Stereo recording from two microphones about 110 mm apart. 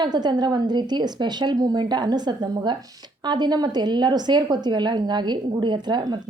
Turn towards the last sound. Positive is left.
turn(degrees=-40)  # may be behind; listen again after turning